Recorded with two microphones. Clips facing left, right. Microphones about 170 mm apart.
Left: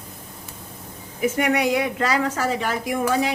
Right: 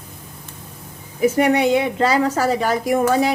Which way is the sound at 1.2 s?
35° right (ahead or behind).